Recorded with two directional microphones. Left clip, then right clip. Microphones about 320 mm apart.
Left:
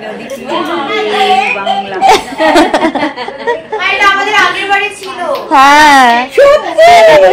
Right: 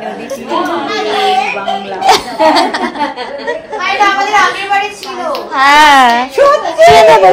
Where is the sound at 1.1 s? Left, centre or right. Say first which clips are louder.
Left 2 dB; right.